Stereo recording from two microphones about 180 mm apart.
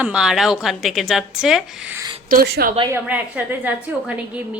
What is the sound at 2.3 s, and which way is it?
Speech, 55° right (ahead or behind).